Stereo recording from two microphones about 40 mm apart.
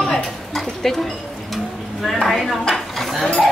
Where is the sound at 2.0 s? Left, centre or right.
Centre.